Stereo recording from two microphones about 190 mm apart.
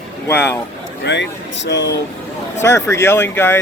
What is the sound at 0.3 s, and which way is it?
Speech, 10° left (ahead or behind).